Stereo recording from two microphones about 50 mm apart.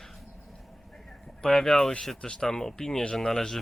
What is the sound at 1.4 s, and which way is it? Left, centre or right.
Speech, centre.